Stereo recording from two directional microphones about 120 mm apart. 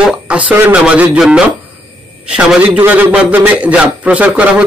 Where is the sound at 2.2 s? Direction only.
10° right (ahead or behind).